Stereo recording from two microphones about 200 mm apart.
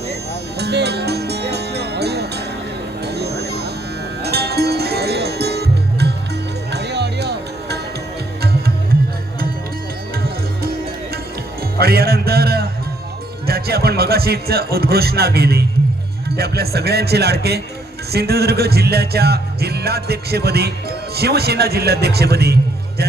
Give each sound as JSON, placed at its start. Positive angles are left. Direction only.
{"t": 0.6, "sound": "music", "side_deg": -55}
{"t": 3.0, "sound": "a sound", "side_deg": -55}
{"t": 4.2, "sound": "music", "side_deg": -55}
{"t": 11.8, "sound": "music", "side_deg": -50}
{"t": 13.5, "sound": "speech", "side_deg": -50}
{"t": 16.4, "sound": "music", "side_deg": -50}